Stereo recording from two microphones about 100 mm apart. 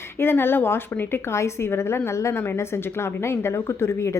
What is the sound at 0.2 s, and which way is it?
Speech, 25° left (ahead or behind).